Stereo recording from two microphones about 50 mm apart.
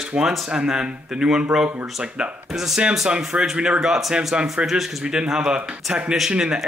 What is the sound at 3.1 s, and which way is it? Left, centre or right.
Speech, centre.